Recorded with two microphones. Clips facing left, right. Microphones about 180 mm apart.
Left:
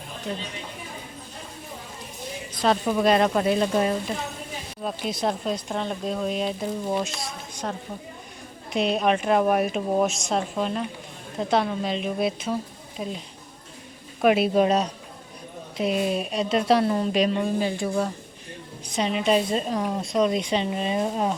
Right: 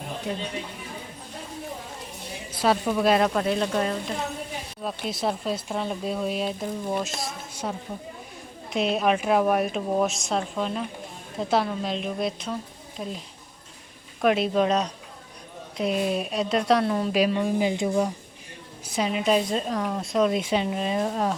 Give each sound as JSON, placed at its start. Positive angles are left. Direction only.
{"t": 0.3, "sound": "speech", "side_deg": -10}
{"t": 2.5, "sound": "a sound", "side_deg": -10}
{"t": 2.8, "sound": "speech", "side_deg": 0}
{"t": 5.0, "sound": "a woman's voice", "side_deg": -5}
{"t": 17.4, "sound": "speech", "side_deg": -15}
{"t": 18.9, "sound": "speech", "side_deg": -5}